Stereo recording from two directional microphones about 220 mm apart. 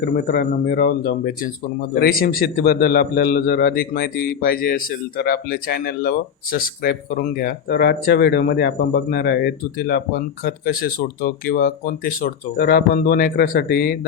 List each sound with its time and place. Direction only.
0.0 s a man's voice: 45° left (ahead or behind)